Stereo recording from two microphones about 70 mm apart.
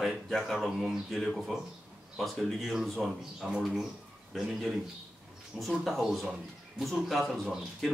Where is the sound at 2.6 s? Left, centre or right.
Centre.